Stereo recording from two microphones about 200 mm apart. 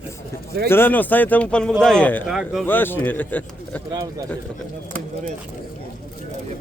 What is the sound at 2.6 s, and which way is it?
Speech, 10° left (ahead or behind).